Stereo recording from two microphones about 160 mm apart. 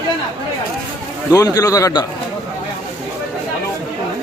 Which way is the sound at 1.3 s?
20° left (ahead or behind).